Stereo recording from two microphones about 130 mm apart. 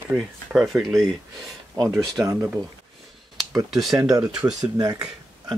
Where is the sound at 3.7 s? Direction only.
Centre (ahead or behind).